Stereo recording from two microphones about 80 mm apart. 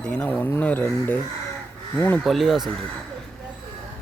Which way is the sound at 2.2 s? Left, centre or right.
Centre.